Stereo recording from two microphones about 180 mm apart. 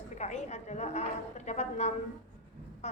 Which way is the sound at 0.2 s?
40° left (ahead or behind).